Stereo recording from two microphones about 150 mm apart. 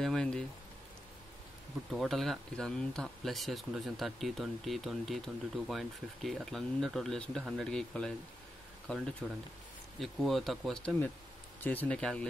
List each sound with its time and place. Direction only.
0.0 s speech: 5° left (ahead or behind)
1.9 s speech: centre (ahead or behind)
11.6 s speech: 10° left (ahead or behind)